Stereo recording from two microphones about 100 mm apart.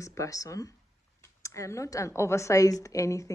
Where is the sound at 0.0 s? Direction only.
30° left (ahead or behind).